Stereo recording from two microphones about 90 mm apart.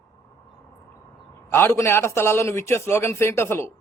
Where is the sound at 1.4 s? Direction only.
30° left (ahead or behind).